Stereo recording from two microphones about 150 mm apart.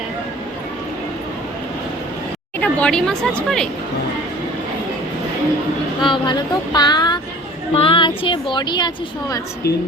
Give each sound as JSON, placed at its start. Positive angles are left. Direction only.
{"t": 2.6, "sound": "speech", "side_deg": 10}
{"t": 6.0, "sound": "speech", "side_deg": 30}
{"t": 7.8, "sound": "music", "side_deg": 35}
{"t": 9.6, "sound": "a woman's voice", "side_deg": 90}